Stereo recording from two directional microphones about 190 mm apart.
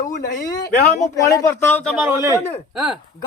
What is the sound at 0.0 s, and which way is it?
Speech, 45° left (ahead or behind).